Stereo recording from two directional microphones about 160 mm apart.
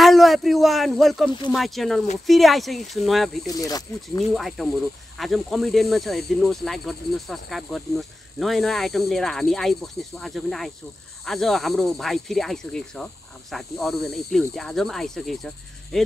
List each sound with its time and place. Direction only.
0.0 s a sound: centre (ahead or behind)
1.5 s speech: centre (ahead or behind)
3.4 s speech: 25° left (ahead or behind)
4.4 s speech: centre (ahead or behind)